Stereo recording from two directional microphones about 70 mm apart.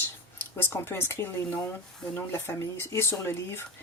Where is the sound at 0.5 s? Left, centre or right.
Left.